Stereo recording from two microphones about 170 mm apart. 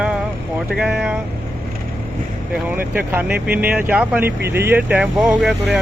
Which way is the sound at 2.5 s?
10° right (ahead or behind).